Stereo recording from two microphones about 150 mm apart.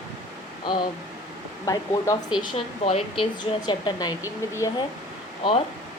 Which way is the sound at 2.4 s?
40° left (ahead or behind).